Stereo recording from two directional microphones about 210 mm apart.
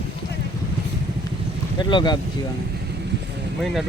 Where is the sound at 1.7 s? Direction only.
20° left (ahead or behind).